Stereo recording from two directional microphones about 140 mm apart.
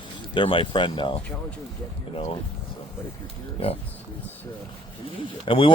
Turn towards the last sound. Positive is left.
turn(degrees=40)  # may be behind; listen again after turning